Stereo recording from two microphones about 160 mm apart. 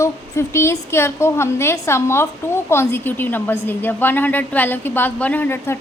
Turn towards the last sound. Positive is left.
turn(degrees=15)  # may be behind; listen again after turning